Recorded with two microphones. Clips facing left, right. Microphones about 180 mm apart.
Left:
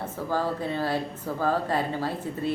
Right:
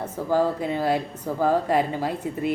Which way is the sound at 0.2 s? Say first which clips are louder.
Right 6 dB; 15° right (ahead or behind).